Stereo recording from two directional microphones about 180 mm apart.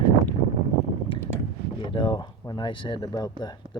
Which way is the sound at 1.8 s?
25° left (ahead or behind).